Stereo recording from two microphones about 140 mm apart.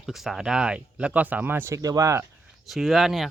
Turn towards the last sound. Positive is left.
turn(degrees=0)  # may be behind; listen again after turning